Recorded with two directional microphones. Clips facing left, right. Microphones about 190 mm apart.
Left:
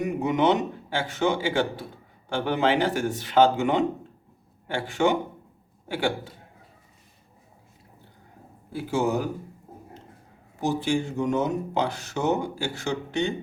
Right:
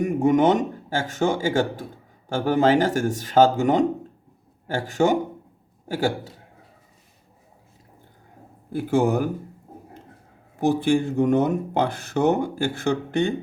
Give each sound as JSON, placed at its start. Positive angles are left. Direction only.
{"t": 0.0, "sound": "a man's voice", "side_deg": -45}
{"t": 8.7, "sound": "speech", "side_deg": -55}
{"t": 10.6, "sound": "speech", "side_deg": -55}